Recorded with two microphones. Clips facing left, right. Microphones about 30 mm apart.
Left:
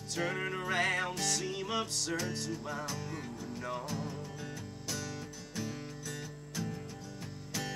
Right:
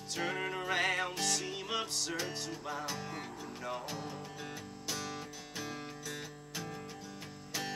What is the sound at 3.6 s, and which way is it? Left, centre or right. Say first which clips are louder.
Music: left 2 dB; centre.